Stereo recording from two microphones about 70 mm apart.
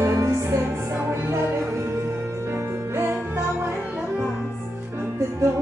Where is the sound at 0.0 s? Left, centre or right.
Right.